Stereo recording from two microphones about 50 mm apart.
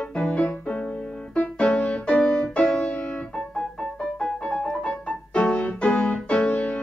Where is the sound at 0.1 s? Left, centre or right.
Centre.